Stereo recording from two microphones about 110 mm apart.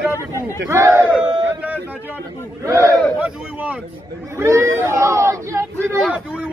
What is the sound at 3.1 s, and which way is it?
Speech, 15° right (ahead or behind).